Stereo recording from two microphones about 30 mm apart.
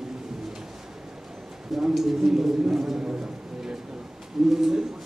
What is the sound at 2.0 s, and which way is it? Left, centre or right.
Speech, centre.